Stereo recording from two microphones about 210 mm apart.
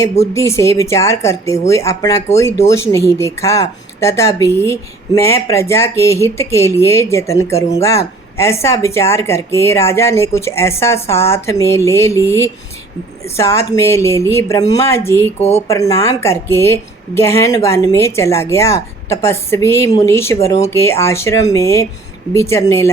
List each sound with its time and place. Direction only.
0.0 s a woman's voice: 15° left (ahead or behind)
15.4 s speech: 30° left (ahead or behind)
15.6 s a woman's voice: 15° left (ahead or behind)